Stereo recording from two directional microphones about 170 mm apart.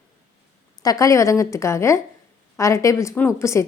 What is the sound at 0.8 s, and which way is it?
A woman's voice, 20° left (ahead or behind).